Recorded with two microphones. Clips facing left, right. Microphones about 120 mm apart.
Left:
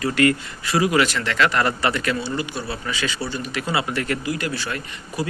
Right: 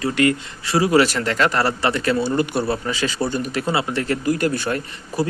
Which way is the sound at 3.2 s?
50° right (ahead or behind).